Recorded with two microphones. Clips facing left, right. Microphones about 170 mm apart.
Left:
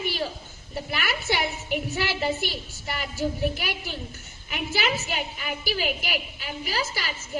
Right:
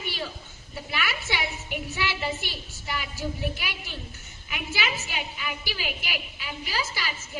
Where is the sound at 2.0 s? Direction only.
45° left (ahead or behind).